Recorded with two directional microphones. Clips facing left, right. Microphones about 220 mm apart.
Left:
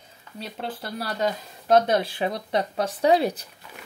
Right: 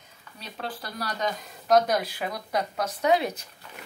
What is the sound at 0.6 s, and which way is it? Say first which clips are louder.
Speech: left 2 dB; 25° left (ahead or behind).